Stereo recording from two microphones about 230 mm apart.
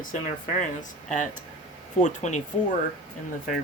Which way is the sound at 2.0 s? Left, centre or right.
Left.